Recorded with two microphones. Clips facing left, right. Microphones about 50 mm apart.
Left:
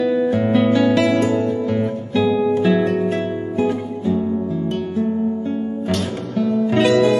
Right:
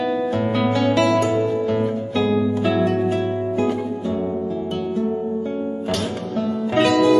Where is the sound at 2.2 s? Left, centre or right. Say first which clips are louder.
Left 2 dB; centre.